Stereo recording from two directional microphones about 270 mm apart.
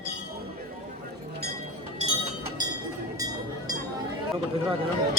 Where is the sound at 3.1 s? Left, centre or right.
Centre.